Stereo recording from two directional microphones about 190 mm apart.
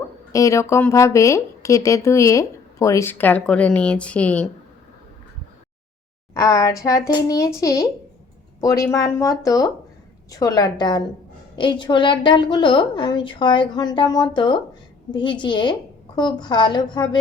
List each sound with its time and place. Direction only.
0.3 s speech: 15° left (ahead or behind)
6.3 s a woman's voice: 20° left (ahead or behind)